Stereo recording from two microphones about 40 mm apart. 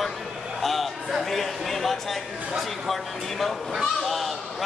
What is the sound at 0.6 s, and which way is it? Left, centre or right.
Speech, centre.